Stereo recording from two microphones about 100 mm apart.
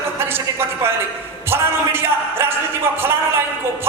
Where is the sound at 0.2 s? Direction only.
20° right (ahead or behind).